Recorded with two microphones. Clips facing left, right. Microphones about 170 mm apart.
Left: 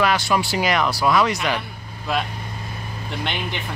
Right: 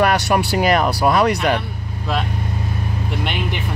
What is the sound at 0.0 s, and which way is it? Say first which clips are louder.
Speech: right 3 dB; 65° right (ahead or behind).